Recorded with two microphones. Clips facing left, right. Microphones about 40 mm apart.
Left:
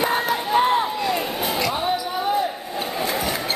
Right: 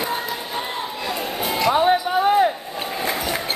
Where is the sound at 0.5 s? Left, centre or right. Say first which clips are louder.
Left 9 dB; left.